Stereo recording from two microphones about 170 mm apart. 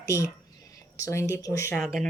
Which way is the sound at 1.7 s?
Centre (ahead or behind).